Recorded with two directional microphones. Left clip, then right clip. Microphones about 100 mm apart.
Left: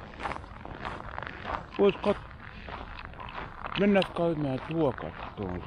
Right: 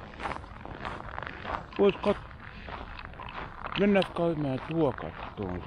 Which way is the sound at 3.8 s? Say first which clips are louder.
Even; 40° right (ahead or behind).